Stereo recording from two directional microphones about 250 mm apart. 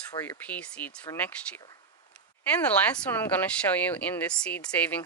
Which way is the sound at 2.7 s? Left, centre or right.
Centre.